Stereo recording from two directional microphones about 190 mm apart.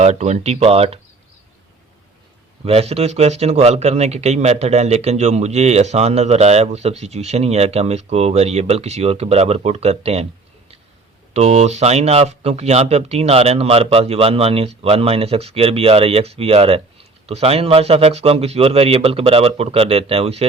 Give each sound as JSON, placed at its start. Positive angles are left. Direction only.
{"t": 0.0, "sound": "speech", "side_deg": -35}
{"t": 2.6, "sound": "speech", "side_deg": -30}
{"t": 11.3, "sound": "speech", "side_deg": -35}